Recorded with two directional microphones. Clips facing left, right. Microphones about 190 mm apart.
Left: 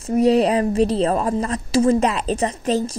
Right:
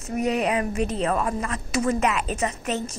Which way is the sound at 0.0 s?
30° left (ahead or behind).